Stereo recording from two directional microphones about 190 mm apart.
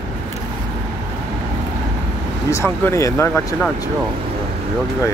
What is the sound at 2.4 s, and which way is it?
Speech, 15° left (ahead or behind).